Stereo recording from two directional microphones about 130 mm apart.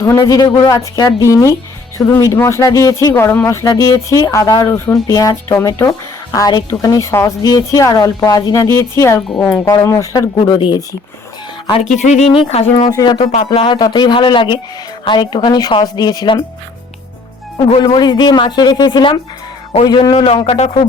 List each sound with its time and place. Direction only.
0.2 s speech: 30° left (ahead or behind)
10.3 s speech: 40° left (ahead or behind)
11.8 s speech: 60° left (ahead or behind)
12.9 s speech: 30° left (ahead or behind)
13.4 s speech: 40° left (ahead or behind)
17.6 s speech: 35° left (ahead or behind)
20.1 s speech: 45° left (ahead or behind)